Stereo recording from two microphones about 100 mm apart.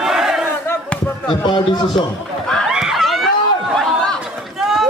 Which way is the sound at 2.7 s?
5° right (ahead or behind).